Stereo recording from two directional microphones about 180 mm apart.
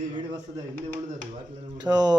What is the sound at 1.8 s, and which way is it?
Speech, 20° right (ahead or behind).